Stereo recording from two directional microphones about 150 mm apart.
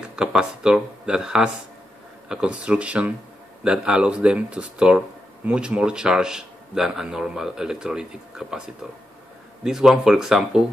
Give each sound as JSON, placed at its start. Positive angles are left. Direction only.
{"t": 0.1, "sound": "speech", "side_deg": -5}